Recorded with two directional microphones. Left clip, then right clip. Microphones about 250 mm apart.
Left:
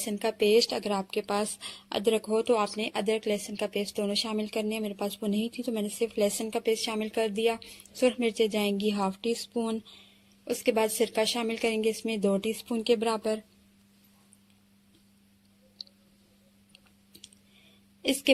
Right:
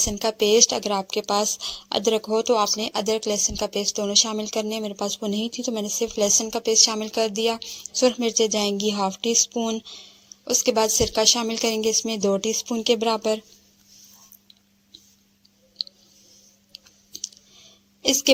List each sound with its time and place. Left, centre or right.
0.0 s a woman's voice: right
18.0 s speech: centre